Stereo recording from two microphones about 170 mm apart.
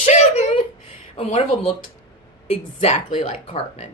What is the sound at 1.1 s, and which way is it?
Speech, 35° left (ahead or behind).